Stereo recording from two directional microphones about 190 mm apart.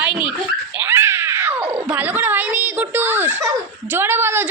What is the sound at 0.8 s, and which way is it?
Cat, 15° right (ahead or behind).